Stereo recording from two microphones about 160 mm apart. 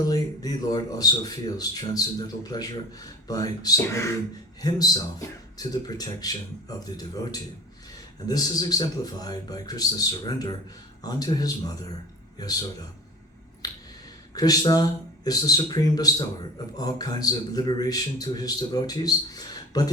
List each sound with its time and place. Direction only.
0.0 s speech: 25° left (ahead or behind)
13.6 s finger snapping: 25° left (ahead or behind)
14.3 s speech: 25° left (ahead or behind)